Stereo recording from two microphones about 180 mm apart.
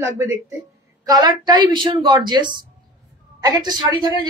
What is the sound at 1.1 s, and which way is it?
A woman's voice, 20° right (ahead or behind).